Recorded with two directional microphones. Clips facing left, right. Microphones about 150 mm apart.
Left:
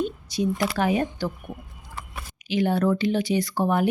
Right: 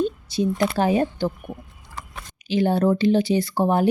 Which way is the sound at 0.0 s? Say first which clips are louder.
Right 4 dB; 30° right (ahead or behind).